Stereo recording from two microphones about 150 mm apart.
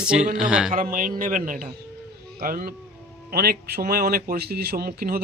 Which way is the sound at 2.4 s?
75° right (ahead or behind).